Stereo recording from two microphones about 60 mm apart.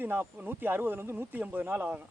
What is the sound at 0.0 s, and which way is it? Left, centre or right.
A man's voice, right.